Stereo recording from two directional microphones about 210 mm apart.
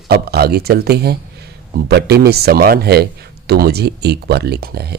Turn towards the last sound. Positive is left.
turn(degrees=-50)  # may be behind; listen again after turning